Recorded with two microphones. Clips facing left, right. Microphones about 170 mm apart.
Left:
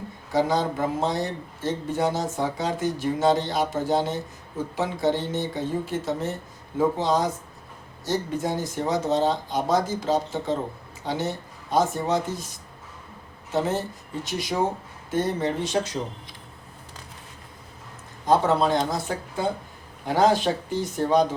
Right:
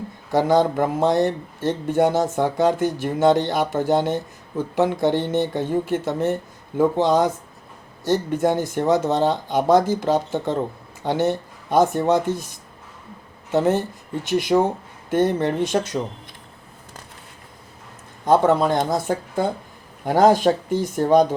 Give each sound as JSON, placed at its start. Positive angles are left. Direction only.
{"t": 0.3, "sound": "speech", "side_deg": -60}
{"t": 13.5, "sound": "speech", "side_deg": -60}
{"t": 18.3, "sound": "speech", "side_deg": -55}